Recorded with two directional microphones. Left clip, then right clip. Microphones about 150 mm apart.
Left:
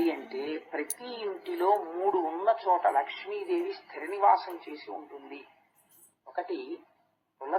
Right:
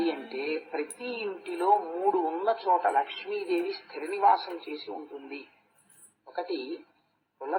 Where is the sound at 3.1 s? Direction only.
20° left (ahead or behind).